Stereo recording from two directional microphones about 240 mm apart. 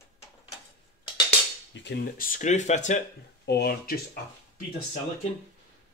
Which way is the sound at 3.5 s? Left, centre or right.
Left.